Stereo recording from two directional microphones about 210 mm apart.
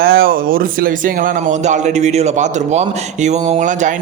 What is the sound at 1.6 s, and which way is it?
A man's voice, 35° right (ahead or behind).